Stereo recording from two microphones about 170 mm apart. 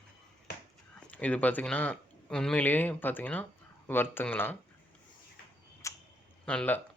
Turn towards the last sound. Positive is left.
turn(degrees=10)  # may be behind; listen again after turning